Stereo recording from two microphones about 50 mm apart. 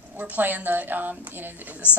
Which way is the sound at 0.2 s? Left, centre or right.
Right.